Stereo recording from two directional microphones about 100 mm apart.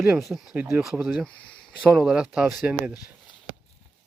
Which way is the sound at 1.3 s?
10° left (ahead or behind).